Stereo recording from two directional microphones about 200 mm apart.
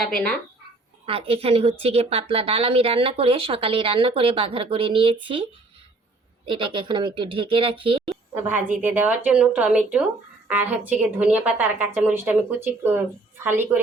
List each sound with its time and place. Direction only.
0.0 s speech: centre (ahead or behind)
1.0 s speech: 30° right (ahead or behind)
6.5 s speech: 25° right (ahead or behind)
8.4 s a woman's voice: 10° right (ahead or behind)